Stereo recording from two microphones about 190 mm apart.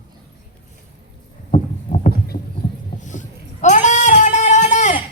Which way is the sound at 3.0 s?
40° left (ahead or behind).